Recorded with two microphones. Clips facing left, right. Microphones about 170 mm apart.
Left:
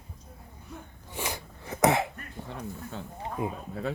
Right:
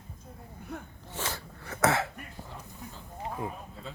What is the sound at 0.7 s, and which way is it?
Sneeze, 60° right (ahead or behind).